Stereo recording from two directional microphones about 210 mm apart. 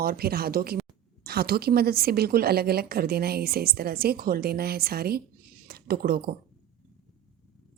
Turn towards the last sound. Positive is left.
turn(degrees=-45)  # may be behind; listen again after turning